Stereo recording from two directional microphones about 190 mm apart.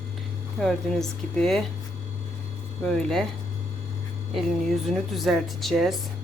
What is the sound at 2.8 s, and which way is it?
Speech, 5° left (ahead or behind).